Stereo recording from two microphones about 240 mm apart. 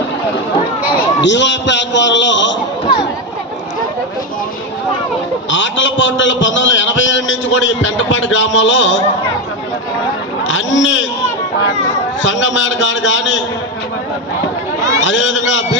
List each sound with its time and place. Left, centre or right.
1.2 s a man's voice: left
5.5 s a man's voice: left
10.5 s a man's voice: left
12.2 s a man's voice: left
14.8 s a man's voice: centre
15.0 s a man's voice: left